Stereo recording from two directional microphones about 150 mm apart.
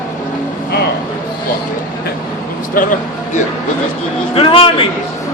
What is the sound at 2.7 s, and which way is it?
Speech, 60° left (ahead or behind).